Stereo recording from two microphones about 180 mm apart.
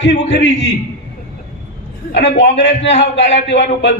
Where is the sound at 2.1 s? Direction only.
80° left.